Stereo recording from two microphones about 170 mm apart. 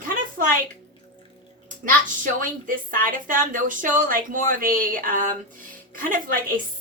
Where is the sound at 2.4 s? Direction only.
55° right (ahead or behind).